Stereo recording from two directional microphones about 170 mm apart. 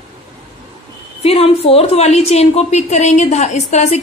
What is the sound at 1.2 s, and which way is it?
A woman's voice, 35° left (ahead or behind).